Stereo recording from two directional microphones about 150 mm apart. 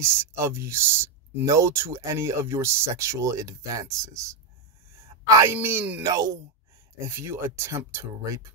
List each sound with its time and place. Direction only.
0.0 s speech: 15° right (ahead or behind)
5.3 s speech: 15° right (ahead or behind)